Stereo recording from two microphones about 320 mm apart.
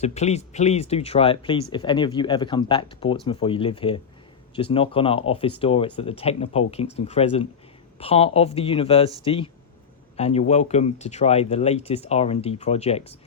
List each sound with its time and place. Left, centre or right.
0.0 s speech: left